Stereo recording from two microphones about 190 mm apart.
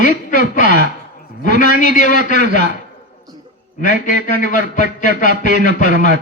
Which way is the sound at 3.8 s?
45° left (ahead or behind).